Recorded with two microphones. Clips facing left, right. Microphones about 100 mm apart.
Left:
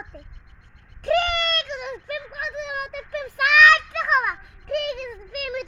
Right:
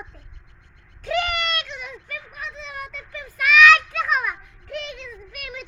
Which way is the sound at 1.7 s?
60° left (ahead or behind).